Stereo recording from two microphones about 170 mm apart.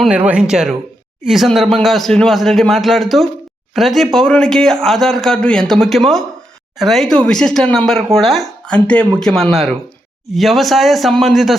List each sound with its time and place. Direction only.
0.0 s speech: 5° right (ahead or behind)